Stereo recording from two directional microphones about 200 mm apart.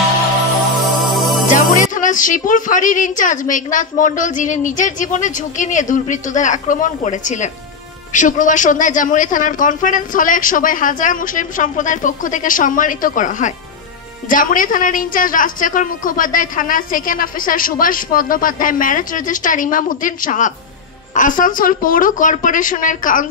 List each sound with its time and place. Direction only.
0.7 s music: centre (ahead or behind)
1.5 s a woman's voice: 40° left (ahead or behind)